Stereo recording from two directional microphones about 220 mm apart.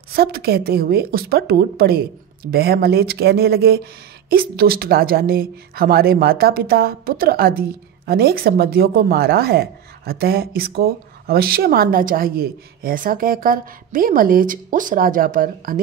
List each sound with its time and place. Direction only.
0.1 s a woman's voice: 45° right (ahead or behind)